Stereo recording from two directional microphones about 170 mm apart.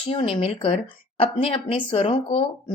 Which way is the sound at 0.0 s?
30° left (ahead or behind).